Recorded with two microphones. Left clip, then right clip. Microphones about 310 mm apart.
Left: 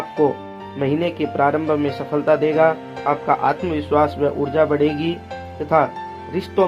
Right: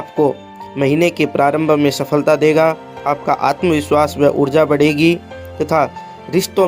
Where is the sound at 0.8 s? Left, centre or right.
Centre.